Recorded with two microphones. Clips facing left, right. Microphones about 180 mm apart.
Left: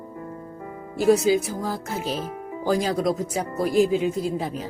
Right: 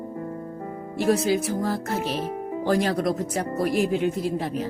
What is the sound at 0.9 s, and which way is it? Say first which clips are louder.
Speech: left 3 dB; centre (ahead or behind).